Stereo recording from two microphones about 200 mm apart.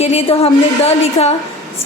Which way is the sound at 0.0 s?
30° left (ahead or behind).